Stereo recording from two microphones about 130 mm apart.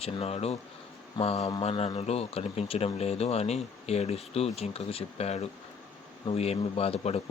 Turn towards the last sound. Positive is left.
turn(degrees=50)  # may be behind; listen again after turning